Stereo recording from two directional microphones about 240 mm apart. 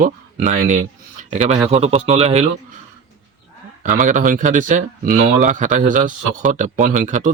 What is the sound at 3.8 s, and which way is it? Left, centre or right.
A man's voice, right.